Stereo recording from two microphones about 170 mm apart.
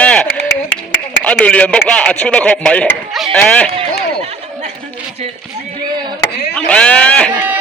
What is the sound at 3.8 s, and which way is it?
Chatter, 35° right (ahead or behind).